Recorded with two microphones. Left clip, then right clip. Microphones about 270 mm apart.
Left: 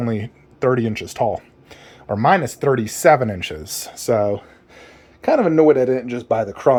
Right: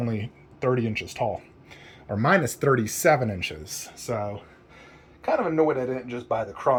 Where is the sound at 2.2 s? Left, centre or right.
Centre; by 4.8 s left.